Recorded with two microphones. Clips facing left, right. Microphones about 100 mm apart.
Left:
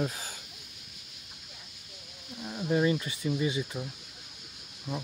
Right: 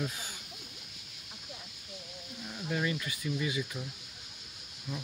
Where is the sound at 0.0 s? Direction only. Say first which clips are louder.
Left 4 dB; 40° left (ahead or behind).